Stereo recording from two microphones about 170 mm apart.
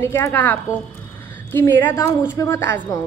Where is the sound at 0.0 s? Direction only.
15° left (ahead or behind).